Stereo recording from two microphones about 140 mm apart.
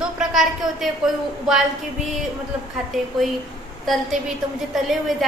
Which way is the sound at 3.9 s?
Centre (ahead or behind).